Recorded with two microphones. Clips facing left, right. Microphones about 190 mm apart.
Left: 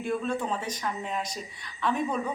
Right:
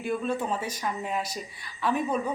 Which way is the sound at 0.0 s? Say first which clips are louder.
Right 1 dB; 5° right (ahead or behind).